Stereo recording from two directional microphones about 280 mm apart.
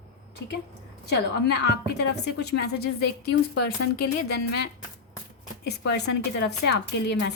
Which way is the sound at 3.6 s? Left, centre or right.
Left.